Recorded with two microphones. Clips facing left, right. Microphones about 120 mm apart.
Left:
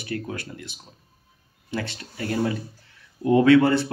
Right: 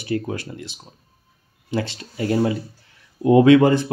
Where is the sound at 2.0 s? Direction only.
20° right (ahead or behind).